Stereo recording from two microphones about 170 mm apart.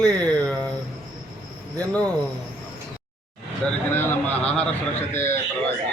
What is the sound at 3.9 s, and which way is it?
A man's voice, 10° left (ahead or behind).